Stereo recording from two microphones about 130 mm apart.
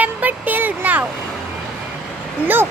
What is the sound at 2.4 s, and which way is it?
Speech, 15° right (ahead or behind).